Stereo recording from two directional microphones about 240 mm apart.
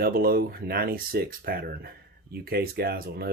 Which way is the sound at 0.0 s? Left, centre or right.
Right.